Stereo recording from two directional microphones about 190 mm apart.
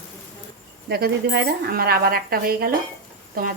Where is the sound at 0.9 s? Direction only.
55° right (ahead or behind).